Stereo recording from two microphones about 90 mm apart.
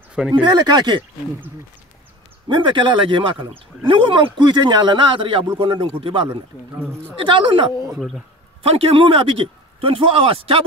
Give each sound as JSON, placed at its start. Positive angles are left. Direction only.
{"t": 0.3, "sound": "speech", "side_deg": -55}
{"t": 2.4, "sound": "speech", "side_deg": -60}
{"t": 7.9, "sound": "a man's voice", "side_deg": 0}
{"t": 8.6, "sound": "a man's voice", "side_deg": -90}